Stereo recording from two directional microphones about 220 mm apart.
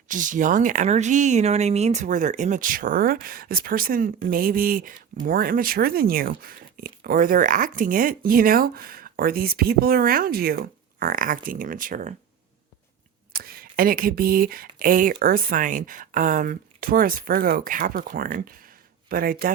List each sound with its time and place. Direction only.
0.1 s speech: 35° right (ahead or behind)
13.3 s speech: 40° right (ahead or behind)